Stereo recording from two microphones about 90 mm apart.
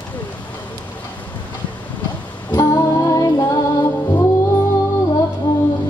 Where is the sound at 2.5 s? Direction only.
40° left (ahead or behind).